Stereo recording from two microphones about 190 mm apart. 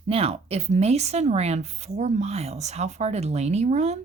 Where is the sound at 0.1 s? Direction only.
30° right (ahead or behind).